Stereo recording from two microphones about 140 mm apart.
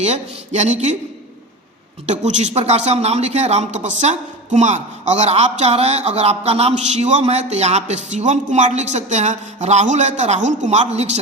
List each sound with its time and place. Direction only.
0.0 s speech: 55° right (ahead or behind)
2.0 s speech: 55° right (ahead or behind)